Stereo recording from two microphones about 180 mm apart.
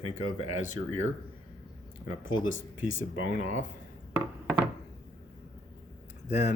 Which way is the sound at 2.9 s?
90° left.